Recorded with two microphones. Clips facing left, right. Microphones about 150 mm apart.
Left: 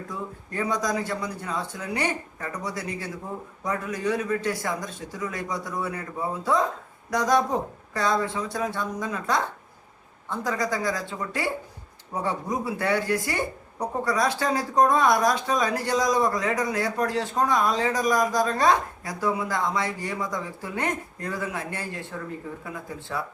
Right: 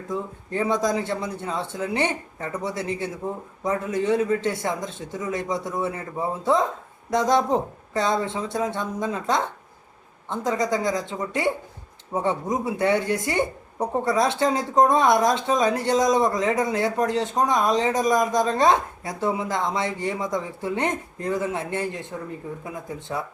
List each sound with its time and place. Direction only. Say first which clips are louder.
0.1 s speech: right 10 dB; 25° right (ahead or behind)